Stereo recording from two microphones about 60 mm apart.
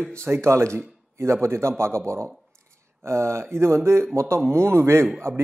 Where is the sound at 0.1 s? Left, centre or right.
Right.